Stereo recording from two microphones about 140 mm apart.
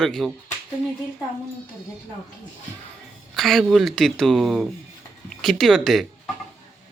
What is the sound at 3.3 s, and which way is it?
Speech, centre (ahead or behind).